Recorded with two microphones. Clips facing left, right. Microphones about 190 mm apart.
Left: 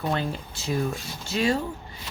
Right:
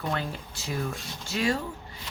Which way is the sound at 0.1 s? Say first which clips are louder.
Left 4 dB; 25° left (ahead or behind).